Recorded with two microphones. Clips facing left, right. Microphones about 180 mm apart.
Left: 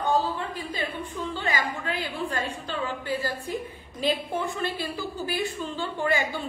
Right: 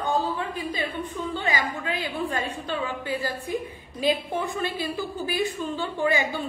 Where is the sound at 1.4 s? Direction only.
15° right (ahead or behind).